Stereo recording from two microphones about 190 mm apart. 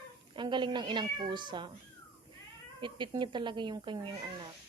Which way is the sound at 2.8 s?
25° right (ahead or behind).